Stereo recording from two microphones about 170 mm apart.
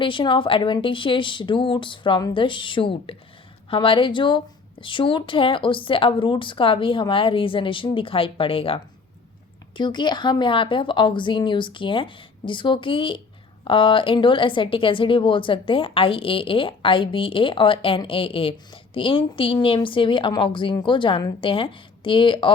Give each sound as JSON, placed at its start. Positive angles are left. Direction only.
{"t": 0.0, "sound": "a woman's voice", "side_deg": 30}